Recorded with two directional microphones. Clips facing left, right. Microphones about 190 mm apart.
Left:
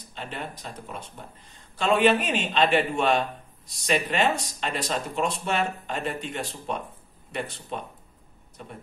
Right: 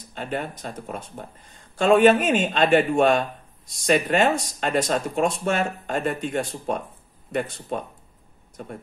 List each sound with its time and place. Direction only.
0.1 s a man's voice: 50° right (ahead or behind)